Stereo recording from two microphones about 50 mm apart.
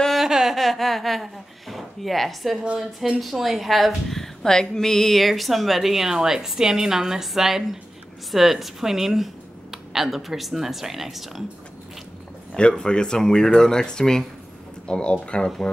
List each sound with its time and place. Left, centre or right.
0.1 s a sound: centre
2.6 s speech: centre
3.2 s a woman's voice: centre
12.5 s speech: centre